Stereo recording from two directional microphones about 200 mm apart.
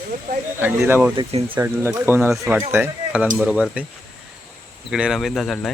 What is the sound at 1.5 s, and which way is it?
Speech, 15° right (ahead or behind).